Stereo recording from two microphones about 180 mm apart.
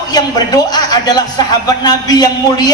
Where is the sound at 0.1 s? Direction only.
20° left (ahead or behind).